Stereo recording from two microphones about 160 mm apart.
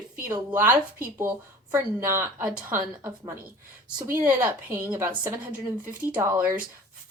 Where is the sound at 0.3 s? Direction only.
15° right (ahead or behind).